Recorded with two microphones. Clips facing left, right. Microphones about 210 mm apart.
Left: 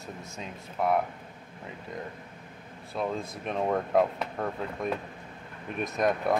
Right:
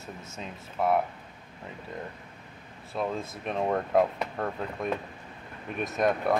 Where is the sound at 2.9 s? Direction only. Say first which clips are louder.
Even; centre (ahead or behind).